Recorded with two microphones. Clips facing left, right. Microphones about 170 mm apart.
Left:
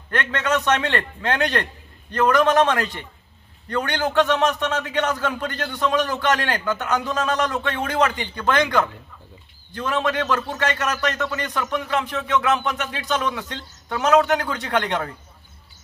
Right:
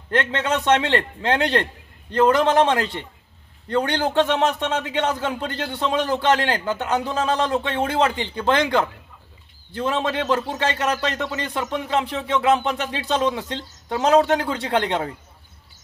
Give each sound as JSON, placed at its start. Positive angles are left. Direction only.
{"t": 0.1, "sound": "a man's voice", "side_deg": -30}